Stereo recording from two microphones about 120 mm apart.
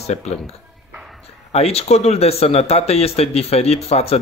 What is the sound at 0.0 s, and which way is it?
Speech, 70° left (ahead or behind).